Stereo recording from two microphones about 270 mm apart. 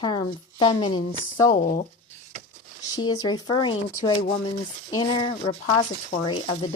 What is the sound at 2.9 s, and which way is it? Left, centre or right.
A woman's voice, centre.